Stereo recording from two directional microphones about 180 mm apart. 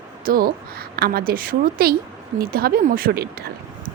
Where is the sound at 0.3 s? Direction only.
55° right (ahead or behind).